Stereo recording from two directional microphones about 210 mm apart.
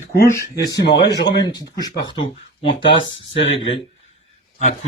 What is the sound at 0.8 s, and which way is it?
Speech, 55° left (ahead or behind).